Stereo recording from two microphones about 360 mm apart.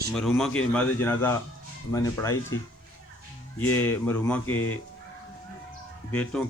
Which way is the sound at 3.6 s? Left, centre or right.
Centre.